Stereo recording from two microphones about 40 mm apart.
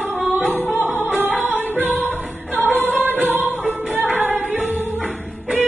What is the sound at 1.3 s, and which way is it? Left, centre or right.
Music, right.